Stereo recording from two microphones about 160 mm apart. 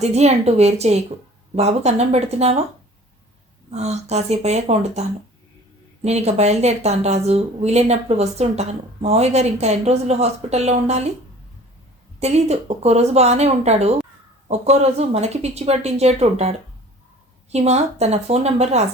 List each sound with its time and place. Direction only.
0.0 s a woman's voice: 45° right (ahead or behind)
3.7 s a woman's voice: 45° right (ahead or behind)
12.2 s a woman's voice: 40° right (ahead or behind)